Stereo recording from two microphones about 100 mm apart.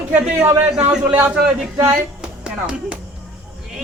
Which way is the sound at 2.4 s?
10° right (ahead or behind).